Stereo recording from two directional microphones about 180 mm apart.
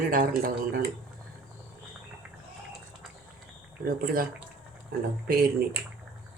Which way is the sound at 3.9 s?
55° right (ahead or behind).